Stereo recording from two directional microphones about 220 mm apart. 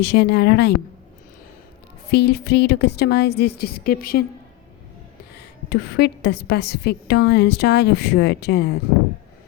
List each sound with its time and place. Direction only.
0.0 s a woman's voice: 50° left (ahead or behind)
2.0 s a woman's voice: 50° left (ahead or behind)
5.6 s a woman's voice: 50° left (ahead or behind)